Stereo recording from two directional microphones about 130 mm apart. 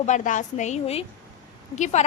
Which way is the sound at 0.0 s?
70° left (ahead or behind).